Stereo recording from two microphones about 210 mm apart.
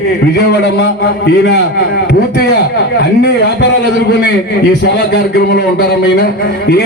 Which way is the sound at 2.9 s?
55° left (ahead or behind).